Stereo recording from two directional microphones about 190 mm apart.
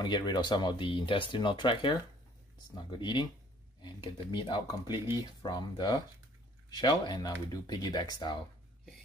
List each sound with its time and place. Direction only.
0.0 s speech: 25° left (ahead or behind)